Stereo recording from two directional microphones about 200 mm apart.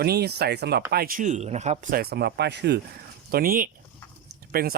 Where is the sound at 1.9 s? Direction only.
50° right (ahead or behind).